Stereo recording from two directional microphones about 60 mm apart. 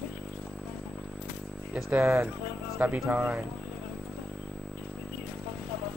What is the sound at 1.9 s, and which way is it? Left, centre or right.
Speech, right.